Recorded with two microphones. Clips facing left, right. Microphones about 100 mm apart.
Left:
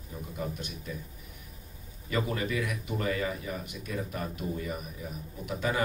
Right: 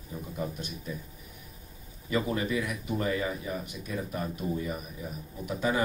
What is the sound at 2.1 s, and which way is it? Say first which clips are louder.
Speech: right 2 dB; 25° right (ahead or behind).